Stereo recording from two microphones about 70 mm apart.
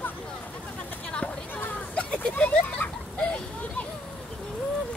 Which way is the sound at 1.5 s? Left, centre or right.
Left.